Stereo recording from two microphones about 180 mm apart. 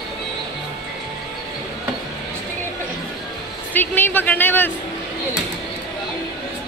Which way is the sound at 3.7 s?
10° left (ahead or behind).